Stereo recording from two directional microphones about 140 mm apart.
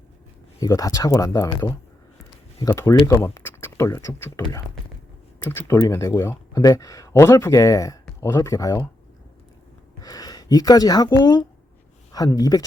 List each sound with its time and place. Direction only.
0.6 s speech: 25° left (ahead or behind)
2.6 s speech: 20° left (ahead or behind)
10.0 s speech: 25° left (ahead or behind)